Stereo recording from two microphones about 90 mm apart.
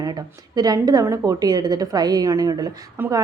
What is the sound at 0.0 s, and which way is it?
A woman's voice, 45° right (ahead or behind).